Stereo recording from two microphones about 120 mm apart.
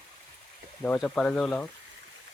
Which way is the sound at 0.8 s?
10° left (ahead or behind).